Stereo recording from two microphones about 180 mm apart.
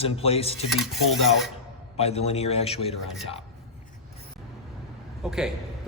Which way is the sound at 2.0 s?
35° left (ahead or behind).